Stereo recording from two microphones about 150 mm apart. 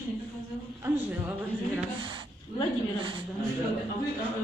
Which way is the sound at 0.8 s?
15° right (ahead or behind).